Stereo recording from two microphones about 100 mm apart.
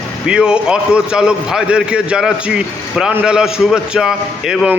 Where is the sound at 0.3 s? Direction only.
10° right (ahead or behind).